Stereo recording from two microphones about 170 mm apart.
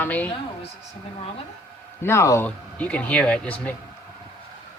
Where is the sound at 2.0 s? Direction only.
15° left (ahead or behind).